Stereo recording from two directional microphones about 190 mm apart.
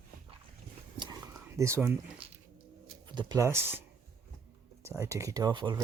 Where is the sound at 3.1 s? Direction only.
20° right (ahead or behind).